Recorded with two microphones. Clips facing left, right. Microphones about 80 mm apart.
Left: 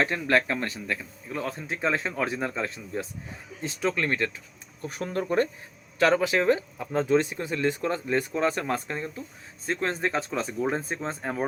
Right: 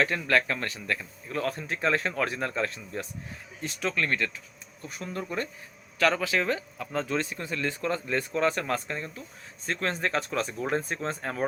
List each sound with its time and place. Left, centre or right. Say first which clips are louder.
0.0 s speech: left 1 dB; left
4.8 s speech: left 5 dB; left
6.0 s speech: left 3 dB; left
10.8 s speech: right 1 dB; centre